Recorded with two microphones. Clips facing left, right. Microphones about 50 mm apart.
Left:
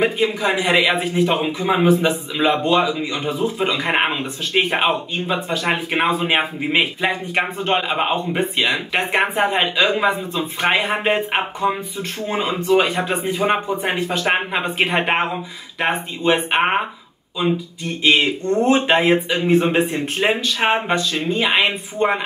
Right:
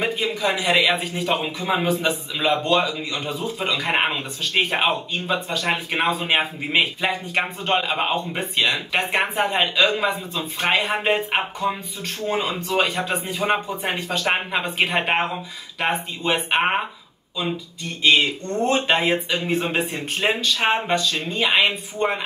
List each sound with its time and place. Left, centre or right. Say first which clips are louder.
0.0 s speech: left 4 dB; centre